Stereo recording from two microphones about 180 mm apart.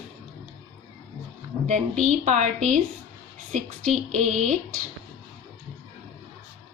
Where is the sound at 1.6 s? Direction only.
40° right (ahead or behind).